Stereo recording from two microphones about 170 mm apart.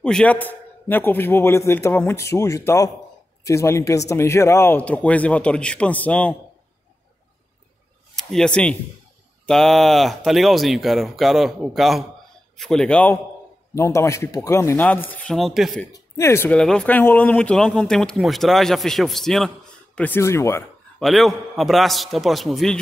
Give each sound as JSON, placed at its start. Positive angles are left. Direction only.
{"t": 0.0, "sound": "a man's voice", "side_deg": 5}
{"t": 8.2, "sound": "a man's voice", "side_deg": 0}
{"t": 15.9, "sound": "speech", "side_deg": 15}
{"t": 16.5, "sound": "speech", "side_deg": 5}
{"t": 20.0, "sound": "a man's voice", "side_deg": 15}
{"t": 21.0, "sound": "speech", "side_deg": 0}